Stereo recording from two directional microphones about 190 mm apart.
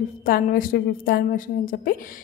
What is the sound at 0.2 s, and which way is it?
A woman's voice, 50° left (ahead or behind).